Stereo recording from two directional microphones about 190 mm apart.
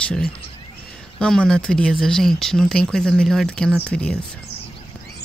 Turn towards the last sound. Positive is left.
turn(degrees=5)  # may be behind; listen again after turning